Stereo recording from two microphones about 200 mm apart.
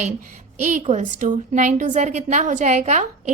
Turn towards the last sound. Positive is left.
turn(degrees=-35)  # may be behind; listen again after turning